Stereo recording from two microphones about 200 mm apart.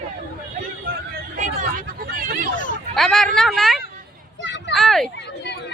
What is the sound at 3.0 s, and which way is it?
Speech, 5° left (ahead or behind).